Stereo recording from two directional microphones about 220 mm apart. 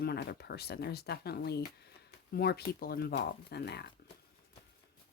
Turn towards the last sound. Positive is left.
turn(degrees=50)  # may be behind; listen again after turning